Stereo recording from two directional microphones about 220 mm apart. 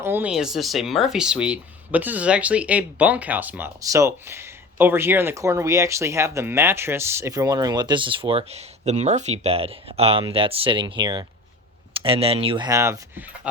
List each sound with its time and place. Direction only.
0.0 s speech: 10° right (ahead or behind)